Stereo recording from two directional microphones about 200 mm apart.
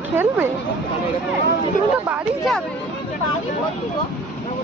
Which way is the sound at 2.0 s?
10° right (ahead or behind).